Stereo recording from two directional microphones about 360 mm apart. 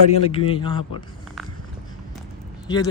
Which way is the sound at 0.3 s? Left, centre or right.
Centre.